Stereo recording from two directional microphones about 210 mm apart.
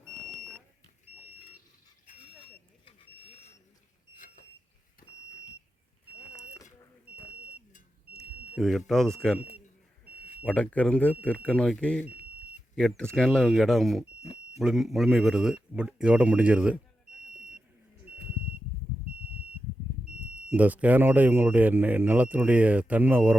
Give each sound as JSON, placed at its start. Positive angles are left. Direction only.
{"t": 0.3, "sound": "smoke detector", "side_deg": 5}
{"t": 2.1, "sound": "smoke detector", "side_deg": 40}
{"t": 2.4, "sound": "vehicle", "side_deg": 25}
{"t": 4.1, "sound": "a sound", "side_deg": 40}
{"t": 5.0, "sound": "smoke detector", "side_deg": 45}
{"t": 8.1, "sound": "smoke detector", "side_deg": 0}
{"t": 8.9, "sound": "a man's voice", "side_deg": 0}
{"t": 10.4, "sound": "a man's voice", "side_deg": 5}
{"t": 20.3, "sound": "speech", "side_deg": -5}